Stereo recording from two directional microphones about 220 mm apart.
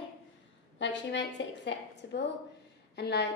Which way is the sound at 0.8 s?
55° left (ahead or behind).